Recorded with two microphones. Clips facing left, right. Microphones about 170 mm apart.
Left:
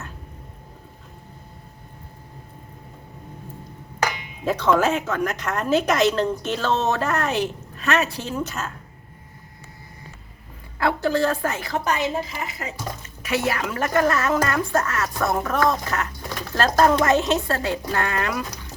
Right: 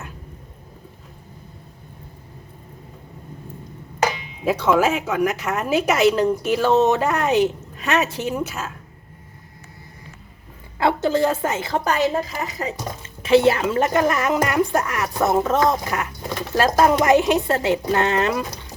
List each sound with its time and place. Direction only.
4.4 s a woman's voice: 10° right (ahead or behind)
10.8 s a woman's voice: 20° right (ahead or behind); by 12.7 s 40° right (ahead or behind)
13.2 s a woman's voice: 30° right (ahead or behind)